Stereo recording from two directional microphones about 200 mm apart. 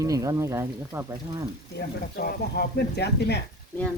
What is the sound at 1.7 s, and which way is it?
Speech, 50° left (ahead or behind).